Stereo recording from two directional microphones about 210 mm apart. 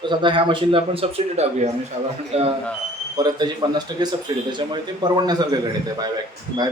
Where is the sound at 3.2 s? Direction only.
20° right (ahead or behind).